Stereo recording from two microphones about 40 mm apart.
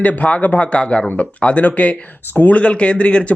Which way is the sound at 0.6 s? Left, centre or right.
Left.